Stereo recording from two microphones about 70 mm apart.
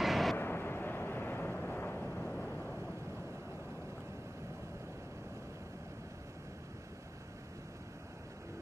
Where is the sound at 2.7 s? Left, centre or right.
Right.